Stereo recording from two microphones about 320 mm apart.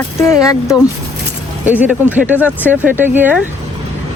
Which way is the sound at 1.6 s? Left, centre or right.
Centre.